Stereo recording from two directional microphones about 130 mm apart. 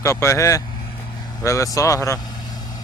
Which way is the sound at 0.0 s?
20° left (ahead or behind).